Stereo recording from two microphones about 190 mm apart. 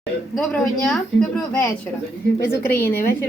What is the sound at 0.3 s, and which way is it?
Speech, 5° left (ahead or behind).